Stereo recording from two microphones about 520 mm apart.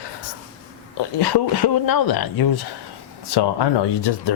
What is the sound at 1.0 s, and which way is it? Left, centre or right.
Speech, left.